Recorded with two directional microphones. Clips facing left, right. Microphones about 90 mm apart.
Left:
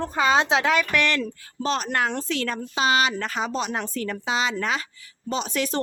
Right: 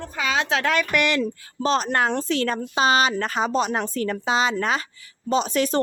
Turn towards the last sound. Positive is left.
turn(degrees=-40)  # may be behind; listen again after turning